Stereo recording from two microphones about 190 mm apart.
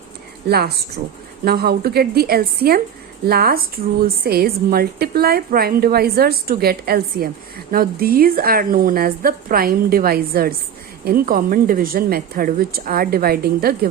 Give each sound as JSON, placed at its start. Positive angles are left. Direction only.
{"t": 0.4, "sound": "a woman's voice", "side_deg": -55}